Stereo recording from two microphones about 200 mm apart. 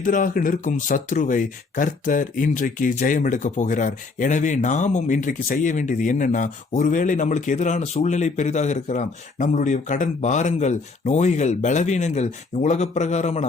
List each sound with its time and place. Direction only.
0.0 s speech: 40° left (ahead or behind)